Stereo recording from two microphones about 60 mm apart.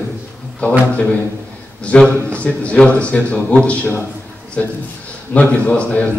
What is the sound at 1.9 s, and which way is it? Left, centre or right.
A man's voice, left.